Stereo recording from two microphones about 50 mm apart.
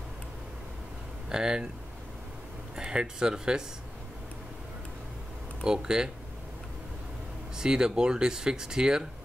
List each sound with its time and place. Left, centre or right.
1.3 s speech: centre
2.7 s speech: centre
5.6 s speech: centre
7.5 s speech: centre